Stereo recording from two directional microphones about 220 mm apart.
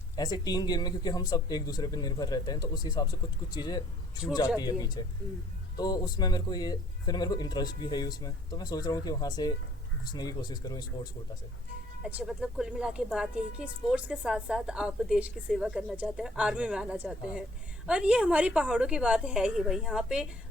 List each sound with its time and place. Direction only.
0.2 s a man's voice: 20° left (ahead or behind)
12.0 s speech: 5° right (ahead or behind)